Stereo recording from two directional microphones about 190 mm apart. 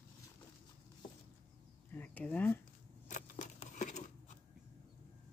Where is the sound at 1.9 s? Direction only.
10° left (ahead or behind).